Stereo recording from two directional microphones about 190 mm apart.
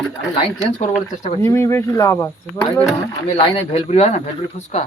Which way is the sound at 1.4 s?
15° left (ahead or behind).